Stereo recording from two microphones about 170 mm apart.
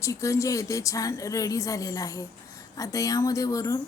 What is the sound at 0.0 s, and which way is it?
Speech, 15° left (ahead or behind).